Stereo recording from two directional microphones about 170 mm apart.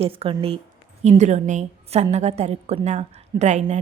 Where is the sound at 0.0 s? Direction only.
35° right (ahead or behind).